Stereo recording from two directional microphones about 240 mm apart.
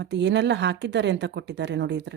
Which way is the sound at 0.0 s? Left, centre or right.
Right.